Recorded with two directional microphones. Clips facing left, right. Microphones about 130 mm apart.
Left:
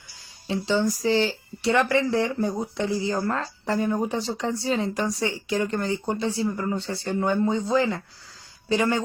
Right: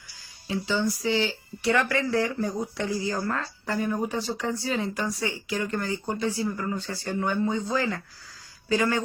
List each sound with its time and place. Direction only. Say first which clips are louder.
0.2 s speech: left 2 dB; 30° left (ahead or behind)